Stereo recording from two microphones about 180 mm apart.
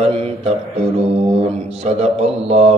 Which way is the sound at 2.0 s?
35° right (ahead or behind).